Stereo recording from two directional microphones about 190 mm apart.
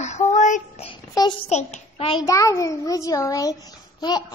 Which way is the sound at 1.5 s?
35° left (ahead or behind).